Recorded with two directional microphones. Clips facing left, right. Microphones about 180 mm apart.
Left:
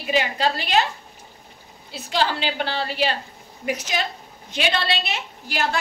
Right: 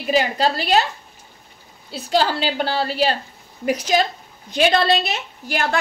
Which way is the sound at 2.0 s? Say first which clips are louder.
Right 4 dB; 40° right (ahead or behind).